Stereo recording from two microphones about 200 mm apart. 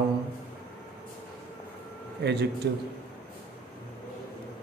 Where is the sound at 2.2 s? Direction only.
60° right (ahead or behind).